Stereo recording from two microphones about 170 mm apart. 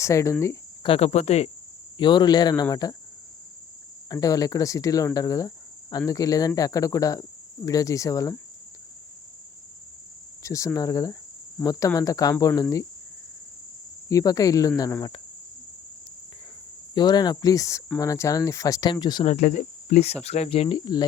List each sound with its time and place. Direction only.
0.0 s speech: 15° left (ahead or behind)
0.8 s speech: 35° left (ahead or behind)
2.0 s speech: 25° left (ahead or behind)
4.1 s speech: 20° left (ahead or behind)
10.4 s cricket: 20° left (ahead or behind)
10.8 s speech: 20° left (ahead or behind)
14.1 s speech: 20° left (ahead or behind)
16.9 s speech: 25° left (ahead or behind)
19.2 s cricket: 45° left (ahead or behind)
20.2 s speech: 40° left (ahead or behind)